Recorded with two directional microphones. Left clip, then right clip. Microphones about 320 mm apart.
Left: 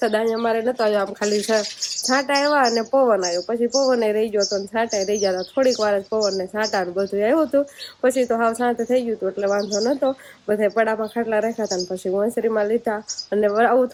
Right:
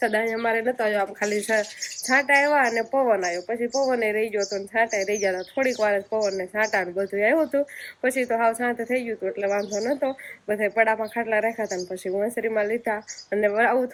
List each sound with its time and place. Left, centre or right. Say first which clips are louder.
0.0 s speech: left 3 dB; centre